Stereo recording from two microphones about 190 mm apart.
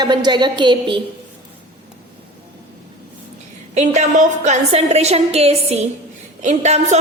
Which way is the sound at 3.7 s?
40° right (ahead or behind).